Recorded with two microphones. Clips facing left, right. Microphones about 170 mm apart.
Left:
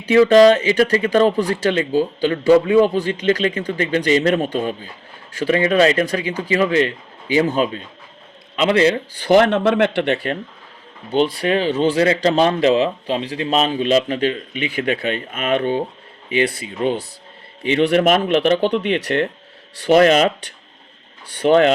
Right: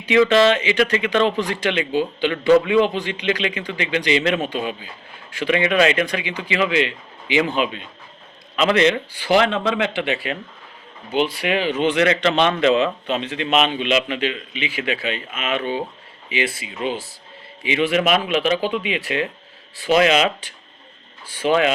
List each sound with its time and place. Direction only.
0.0 s speech: 40° left (ahead or behind)
8.5 s a man's voice: 30° left (ahead or behind)
9.2 s speech: 50° left (ahead or behind)
11.3 s speech: 35° left (ahead or behind)
17.9 s speech: 50° left (ahead or behind)
19.8 s speech: 50° left (ahead or behind)
21.4 s speech: 55° left (ahead or behind)